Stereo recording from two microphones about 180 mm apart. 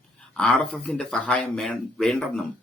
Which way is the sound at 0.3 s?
5° left (ahead or behind).